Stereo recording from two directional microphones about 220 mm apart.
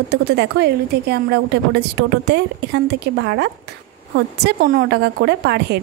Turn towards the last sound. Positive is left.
turn(degrees=-50)  # may be behind; listen again after turning